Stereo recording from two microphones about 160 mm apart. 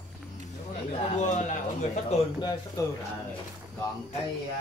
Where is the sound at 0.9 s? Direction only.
45° left (ahead or behind).